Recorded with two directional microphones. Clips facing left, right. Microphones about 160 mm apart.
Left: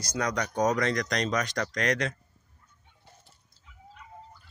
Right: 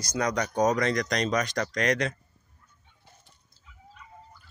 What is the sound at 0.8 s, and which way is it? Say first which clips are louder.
Speech: right 1 dB; 10° right (ahead or behind).